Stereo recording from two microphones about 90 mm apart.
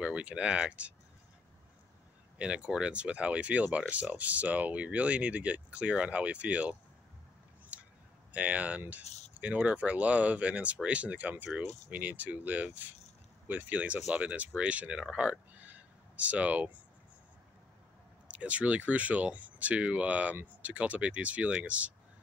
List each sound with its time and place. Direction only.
0.0 s speech: 10° right (ahead or behind)
2.3 s speech: 10° right (ahead or behind)
7.7 s a sound: 15° right (ahead or behind)
8.3 s speech: 15° right (ahead or behind)
18.3 s speech: 15° right (ahead or behind)